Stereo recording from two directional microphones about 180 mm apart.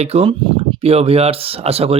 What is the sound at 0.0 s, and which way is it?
Speech, 35° right (ahead or behind).